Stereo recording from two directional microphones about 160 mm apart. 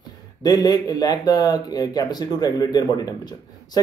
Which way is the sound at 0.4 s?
25° left (ahead or behind).